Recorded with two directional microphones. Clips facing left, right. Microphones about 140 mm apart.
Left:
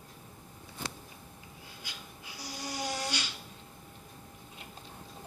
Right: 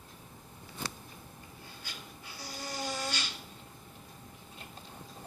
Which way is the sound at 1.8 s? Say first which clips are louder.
Left 1 dB; 15° left (ahead or behind).